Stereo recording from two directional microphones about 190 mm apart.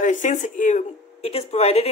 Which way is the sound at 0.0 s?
40° left (ahead or behind).